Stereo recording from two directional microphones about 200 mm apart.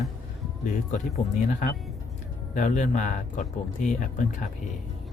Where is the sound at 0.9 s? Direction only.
35° left (ahead or behind).